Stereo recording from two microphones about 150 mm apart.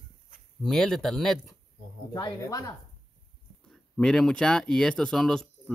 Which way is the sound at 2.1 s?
25° left (ahead or behind).